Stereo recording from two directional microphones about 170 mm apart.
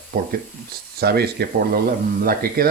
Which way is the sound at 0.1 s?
60° right (ahead or behind).